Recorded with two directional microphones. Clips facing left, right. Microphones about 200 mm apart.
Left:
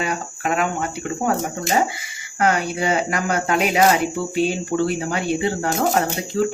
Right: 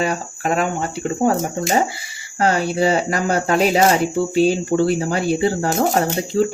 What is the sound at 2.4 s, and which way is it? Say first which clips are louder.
Speech: right 3 dB; 30° right (ahead or behind).